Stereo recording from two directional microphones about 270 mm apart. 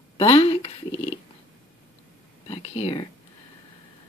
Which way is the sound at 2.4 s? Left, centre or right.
Left.